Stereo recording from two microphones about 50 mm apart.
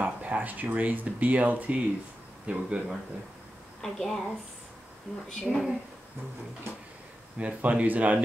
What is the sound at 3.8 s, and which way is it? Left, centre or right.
Speech, centre.